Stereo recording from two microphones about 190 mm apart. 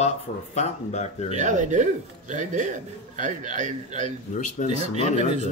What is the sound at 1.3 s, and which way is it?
Speech, 40° right (ahead or behind).